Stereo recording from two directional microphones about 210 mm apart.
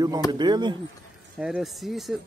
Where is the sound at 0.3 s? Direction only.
20° right (ahead or behind).